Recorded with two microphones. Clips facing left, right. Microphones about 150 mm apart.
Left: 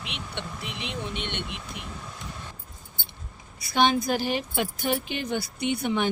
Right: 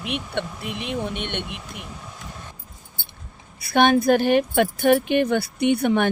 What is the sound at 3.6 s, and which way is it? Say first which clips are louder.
Speech: right 6 dB; 55° right (ahead or behind).